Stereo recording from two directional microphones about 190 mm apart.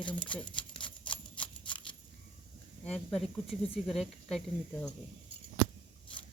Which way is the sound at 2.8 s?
5° left (ahead or behind).